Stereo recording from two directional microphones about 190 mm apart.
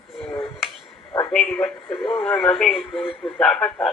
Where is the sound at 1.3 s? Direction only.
5° left (ahead or behind).